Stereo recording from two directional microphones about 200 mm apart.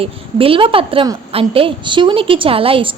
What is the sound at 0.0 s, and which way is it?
A woman's voice, 25° right (ahead or behind).